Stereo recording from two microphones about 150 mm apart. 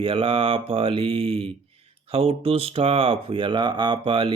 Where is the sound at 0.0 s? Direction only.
35° right (ahead or behind).